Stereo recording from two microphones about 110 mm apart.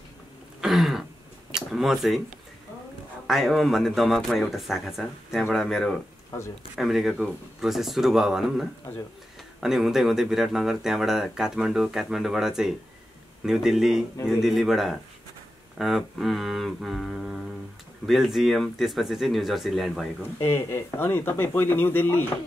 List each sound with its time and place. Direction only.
0.6 s throat clearing: centre (ahead or behind)
1.5 s speech: 5° right (ahead or behind)
3.3 s speech: centre (ahead or behind)
20.3 s speech: 25° left (ahead or behind)